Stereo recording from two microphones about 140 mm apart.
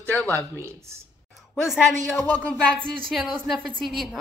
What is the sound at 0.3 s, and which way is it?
Speech, 20° right (ahead or behind).